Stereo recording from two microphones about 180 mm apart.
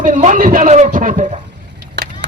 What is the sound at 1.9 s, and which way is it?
Vehicle, 75° right (ahead or behind).